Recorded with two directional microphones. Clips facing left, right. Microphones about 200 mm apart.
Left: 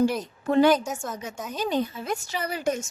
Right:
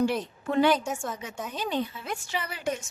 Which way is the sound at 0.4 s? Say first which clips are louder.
Left 4 dB; 40° left (ahead or behind).